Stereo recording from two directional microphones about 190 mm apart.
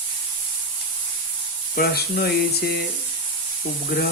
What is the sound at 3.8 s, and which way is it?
Speech, 55° left (ahead or behind).